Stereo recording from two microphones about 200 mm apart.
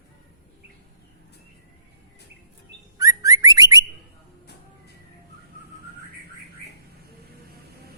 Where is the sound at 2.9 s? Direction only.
15° right (ahead or behind).